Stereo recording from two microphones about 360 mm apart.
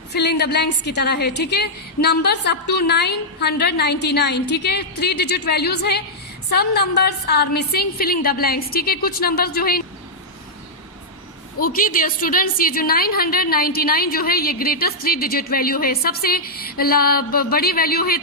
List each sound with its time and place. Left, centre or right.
0.1 s a woman's voice: left
11.6 s a woman's voice: left